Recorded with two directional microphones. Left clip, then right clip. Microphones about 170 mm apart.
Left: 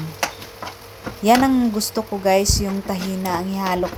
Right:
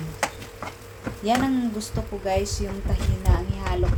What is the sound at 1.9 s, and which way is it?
A woman's voice, 45° left (ahead or behind).